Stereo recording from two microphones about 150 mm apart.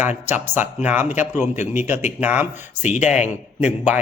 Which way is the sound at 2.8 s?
55° left (ahead or behind).